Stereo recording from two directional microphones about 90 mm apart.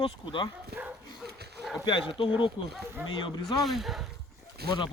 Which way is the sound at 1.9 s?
65° left (ahead or behind).